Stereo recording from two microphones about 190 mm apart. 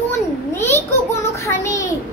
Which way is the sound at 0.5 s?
15° left (ahead or behind).